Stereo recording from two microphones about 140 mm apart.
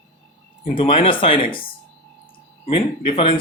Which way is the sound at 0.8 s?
40° left (ahead or behind).